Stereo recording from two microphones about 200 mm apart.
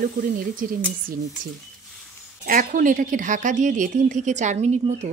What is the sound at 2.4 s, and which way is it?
A woman's voice, 40° right (ahead or behind).